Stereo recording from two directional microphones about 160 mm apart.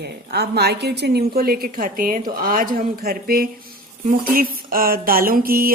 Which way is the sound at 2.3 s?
65° right (ahead or behind).